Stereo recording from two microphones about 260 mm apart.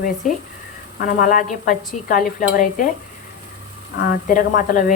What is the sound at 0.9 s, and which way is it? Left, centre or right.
A woman's voice, left.